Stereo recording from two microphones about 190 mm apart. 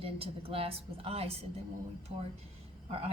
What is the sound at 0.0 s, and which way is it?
A woman's voice, 30° right (ahead or behind).